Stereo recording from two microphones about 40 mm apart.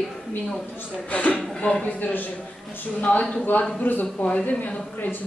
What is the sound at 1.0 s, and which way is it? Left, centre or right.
Speech, left.